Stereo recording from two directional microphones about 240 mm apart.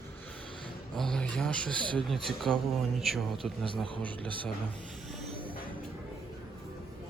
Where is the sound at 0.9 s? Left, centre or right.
Centre.